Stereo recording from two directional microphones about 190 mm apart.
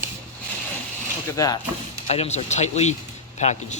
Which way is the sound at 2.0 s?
35° left (ahead or behind).